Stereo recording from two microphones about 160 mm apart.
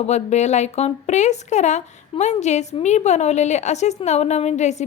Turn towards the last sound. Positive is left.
turn(degrees=45)  # may be behind; listen again after turning